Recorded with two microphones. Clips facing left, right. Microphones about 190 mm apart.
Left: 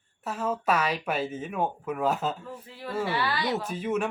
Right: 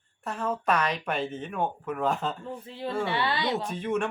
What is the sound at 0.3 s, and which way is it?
Speech, 5° left (ahead or behind).